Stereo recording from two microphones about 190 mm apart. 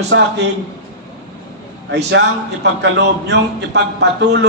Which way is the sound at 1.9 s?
65° right (ahead or behind).